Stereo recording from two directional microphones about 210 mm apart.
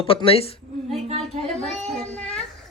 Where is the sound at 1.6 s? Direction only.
Centre (ahead or behind).